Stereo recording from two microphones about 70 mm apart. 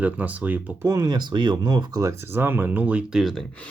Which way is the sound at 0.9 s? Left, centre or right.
Right.